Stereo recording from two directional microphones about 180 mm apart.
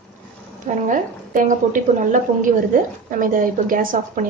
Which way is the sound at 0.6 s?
45° right (ahead or behind).